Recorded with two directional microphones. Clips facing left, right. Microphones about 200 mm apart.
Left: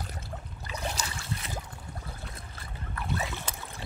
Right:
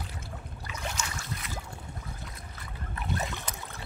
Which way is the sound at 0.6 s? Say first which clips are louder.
Left 2 dB; 35° left (ahead or behind).